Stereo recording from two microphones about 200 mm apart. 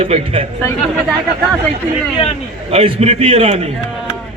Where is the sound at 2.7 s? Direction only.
30° right (ahead or behind).